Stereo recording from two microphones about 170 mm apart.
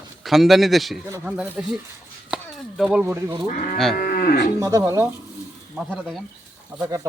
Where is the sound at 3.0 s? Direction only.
15° right (ahead or behind).